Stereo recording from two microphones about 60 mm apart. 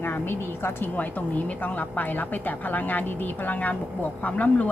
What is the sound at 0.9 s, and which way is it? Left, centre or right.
A woman's voice, left.